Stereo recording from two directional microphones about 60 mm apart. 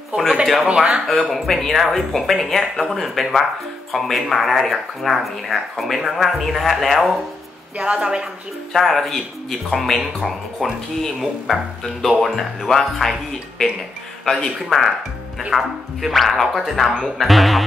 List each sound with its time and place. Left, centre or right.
0.7 s a woman's voice: centre
1.3 s speech: centre
7.7 s a woman's voice: centre
8.7 s speech: centre